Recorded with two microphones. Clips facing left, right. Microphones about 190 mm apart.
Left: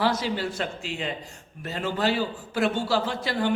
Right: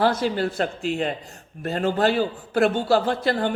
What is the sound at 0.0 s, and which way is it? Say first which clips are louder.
A man's voice: right 4 dB; 50° right (ahead or behind).